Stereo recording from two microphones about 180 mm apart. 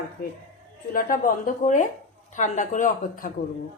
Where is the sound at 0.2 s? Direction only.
50° left (ahead or behind).